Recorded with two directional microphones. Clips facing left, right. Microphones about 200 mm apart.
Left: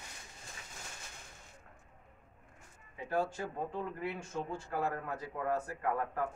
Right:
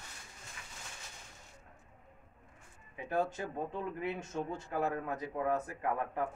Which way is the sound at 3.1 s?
20° right (ahead or behind).